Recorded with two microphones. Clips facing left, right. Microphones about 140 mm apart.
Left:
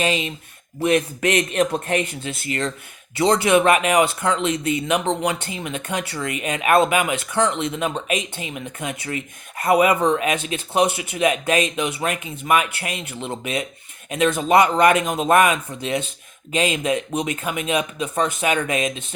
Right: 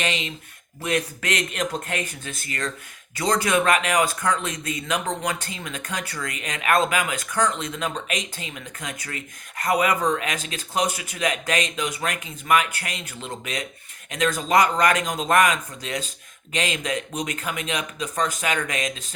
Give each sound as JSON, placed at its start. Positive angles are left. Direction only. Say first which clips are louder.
{"t": 0.0, "sound": "speech", "louder": "left 6 dB", "side_deg": 20}